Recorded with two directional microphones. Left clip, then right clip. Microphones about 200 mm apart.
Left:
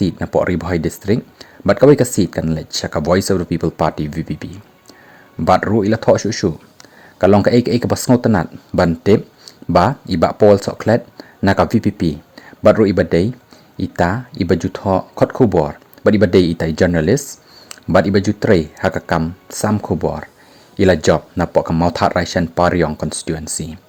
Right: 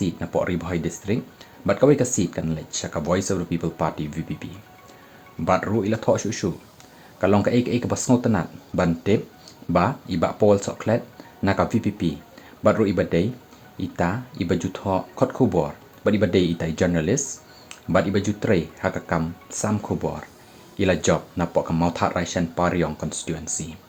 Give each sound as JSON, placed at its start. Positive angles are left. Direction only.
{"t": 0.0, "sound": "speech", "side_deg": 45}
{"t": 5.5, "sound": "speech", "side_deg": 45}